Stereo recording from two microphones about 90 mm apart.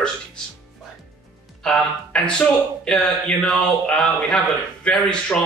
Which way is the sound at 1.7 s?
10° left (ahead or behind).